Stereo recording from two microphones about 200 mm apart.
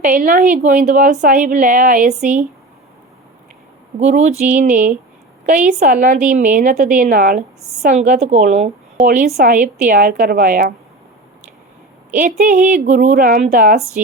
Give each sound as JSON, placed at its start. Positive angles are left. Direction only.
{"t": 0.0, "sound": "a woman's voice", "side_deg": -45}
{"t": 4.2, "sound": "a woman's voice", "side_deg": -35}
{"t": 12.1, "sound": "a woman's voice", "side_deg": -40}